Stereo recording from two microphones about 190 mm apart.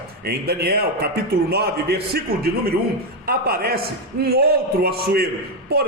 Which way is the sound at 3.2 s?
55° right (ahead or behind).